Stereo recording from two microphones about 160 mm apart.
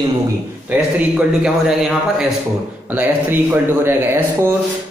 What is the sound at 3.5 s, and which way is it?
Speech, 15° right (ahead or behind).